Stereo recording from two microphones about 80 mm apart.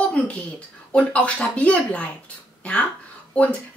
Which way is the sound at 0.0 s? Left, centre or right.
Centre.